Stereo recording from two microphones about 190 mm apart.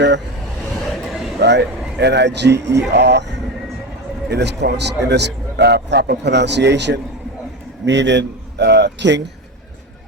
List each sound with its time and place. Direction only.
1.4 s a man's voice: 65° right (ahead or behind)
4.3 s a man's voice: 60° right (ahead or behind)